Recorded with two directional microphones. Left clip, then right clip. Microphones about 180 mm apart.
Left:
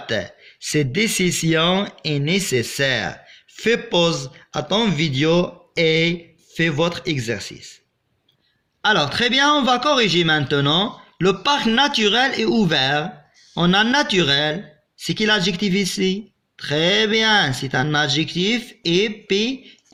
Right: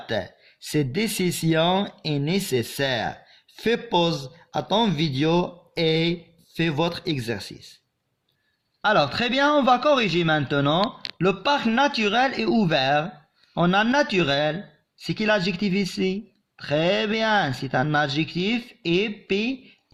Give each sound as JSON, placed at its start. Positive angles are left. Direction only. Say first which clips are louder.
{"t": 0.1, "sound": "speech", "louder": "left 4 dB", "side_deg": -45}
{"t": 8.8, "sound": "speech", "louder": "left 3 dB", "side_deg": -50}